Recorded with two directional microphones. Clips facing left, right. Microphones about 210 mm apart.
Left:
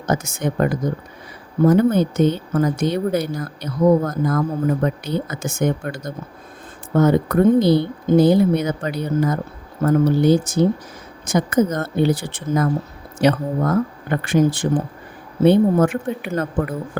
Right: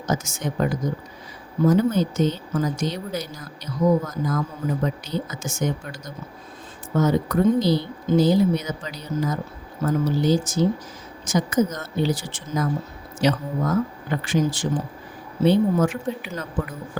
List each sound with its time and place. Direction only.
0.0 s speech: 60° left (ahead or behind)